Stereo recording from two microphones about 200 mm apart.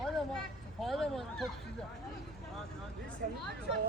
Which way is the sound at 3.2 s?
45° right (ahead or behind).